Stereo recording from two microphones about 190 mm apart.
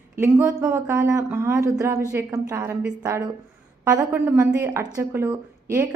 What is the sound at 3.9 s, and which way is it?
A woman's voice, 15° right (ahead or behind).